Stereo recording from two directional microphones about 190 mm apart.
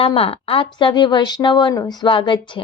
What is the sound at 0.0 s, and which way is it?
A woman's voice, 30° left (ahead or behind).